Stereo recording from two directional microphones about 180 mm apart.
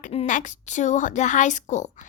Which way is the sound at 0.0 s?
40° left (ahead or behind).